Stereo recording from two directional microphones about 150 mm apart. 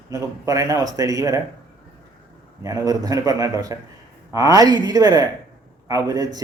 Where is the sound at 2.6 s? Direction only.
25° right (ahead or behind).